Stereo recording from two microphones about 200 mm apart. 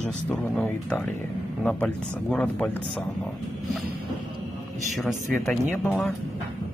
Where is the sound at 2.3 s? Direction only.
5° left (ahead or behind).